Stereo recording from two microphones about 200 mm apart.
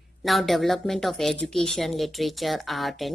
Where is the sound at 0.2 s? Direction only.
Centre (ahead or behind).